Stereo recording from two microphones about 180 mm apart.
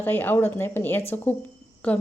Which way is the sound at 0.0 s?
10° left (ahead or behind).